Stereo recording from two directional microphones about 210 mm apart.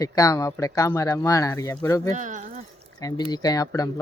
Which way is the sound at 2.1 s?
35° right (ahead or behind).